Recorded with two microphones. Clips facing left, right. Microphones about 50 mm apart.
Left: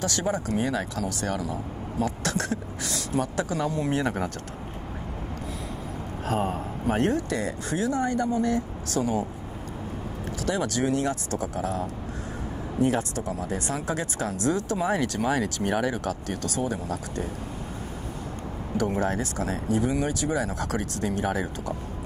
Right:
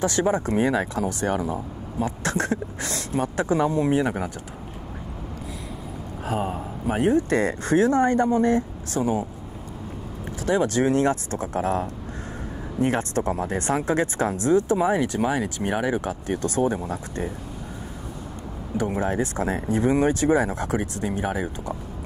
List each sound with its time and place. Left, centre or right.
0.0 s speech: right
6.2 s a man's voice: centre
7.2 s speech: right
10.4 s speech: right
18.8 s speech: right